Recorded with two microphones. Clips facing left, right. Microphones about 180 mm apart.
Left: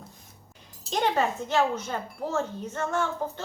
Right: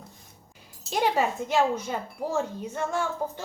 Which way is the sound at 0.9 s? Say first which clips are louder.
Right 1 dB; 10° right (ahead or behind).